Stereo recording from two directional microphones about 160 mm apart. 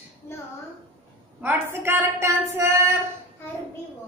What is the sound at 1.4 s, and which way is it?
A woman's voice, 15° right (ahead or behind).